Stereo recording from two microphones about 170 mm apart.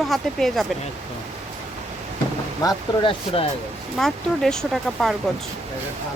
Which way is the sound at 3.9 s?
Centre (ahead or behind).